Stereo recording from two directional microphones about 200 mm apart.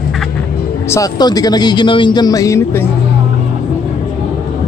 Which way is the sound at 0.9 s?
20° left (ahead or behind).